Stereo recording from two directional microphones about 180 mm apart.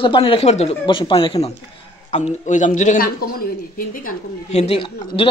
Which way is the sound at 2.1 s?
40° left (ahead or behind).